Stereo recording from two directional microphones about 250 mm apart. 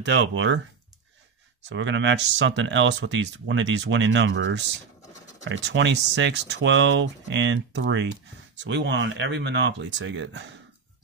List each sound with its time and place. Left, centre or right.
0.0 s speech: right
1.7 s speech: right